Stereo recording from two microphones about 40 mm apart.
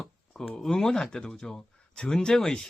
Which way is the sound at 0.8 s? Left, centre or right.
Centre.